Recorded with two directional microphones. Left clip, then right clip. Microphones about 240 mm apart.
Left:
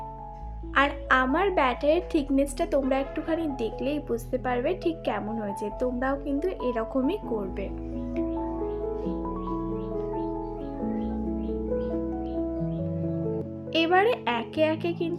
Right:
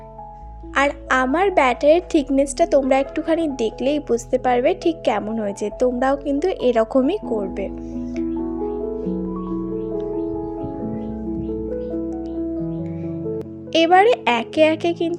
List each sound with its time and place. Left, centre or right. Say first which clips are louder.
0.7 s a woman's voice: right 4 dB; right
13.7 s a woman's voice: right 9 dB; right